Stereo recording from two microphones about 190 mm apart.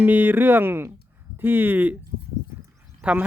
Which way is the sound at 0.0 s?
10° right (ahead or behind).